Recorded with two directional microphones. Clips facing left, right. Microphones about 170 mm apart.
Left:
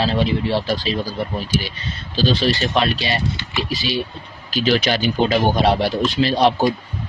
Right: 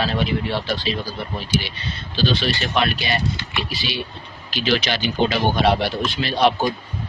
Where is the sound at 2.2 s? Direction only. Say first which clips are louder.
Left 3 dB; 35° left (ahead or behind).